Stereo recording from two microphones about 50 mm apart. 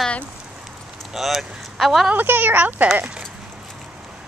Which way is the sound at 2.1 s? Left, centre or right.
Right.